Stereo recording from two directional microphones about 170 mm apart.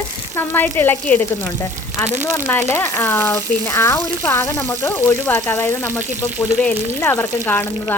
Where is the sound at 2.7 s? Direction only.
15° left (ahead or behind).